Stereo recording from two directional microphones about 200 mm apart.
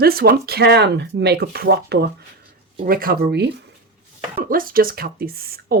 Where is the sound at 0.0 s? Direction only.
50° right (ahead or behind).